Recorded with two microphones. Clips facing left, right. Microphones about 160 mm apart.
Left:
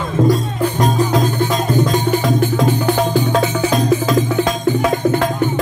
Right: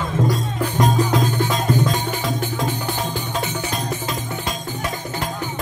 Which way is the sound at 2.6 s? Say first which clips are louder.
Left 9 dB; 75° left (ahead or behind).